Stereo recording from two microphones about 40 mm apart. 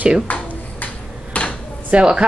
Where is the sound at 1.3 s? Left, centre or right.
Left.